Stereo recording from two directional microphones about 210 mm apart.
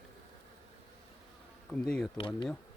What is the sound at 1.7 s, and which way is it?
Speech, 5° left (ahead or behind).